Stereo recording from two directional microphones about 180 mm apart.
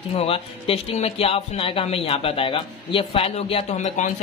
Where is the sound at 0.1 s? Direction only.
30° left (ahead or behind).